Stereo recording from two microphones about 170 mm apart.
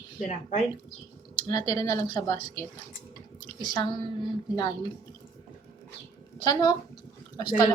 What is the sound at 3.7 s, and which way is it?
Speech, 25° left (ahead or behind).